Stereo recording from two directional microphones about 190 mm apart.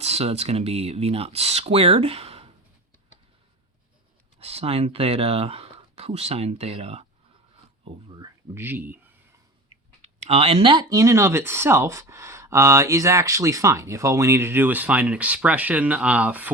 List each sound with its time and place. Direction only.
0.0 s speech: 35° right (ahead or behind)
4.4 s speech: 30° right (ahead or behind)
8.5 s speech: 10° right (ahead or behind)
10.0 s speech: 30° right (ahead or behind); by 16.5 s 10° right (ahead or behind)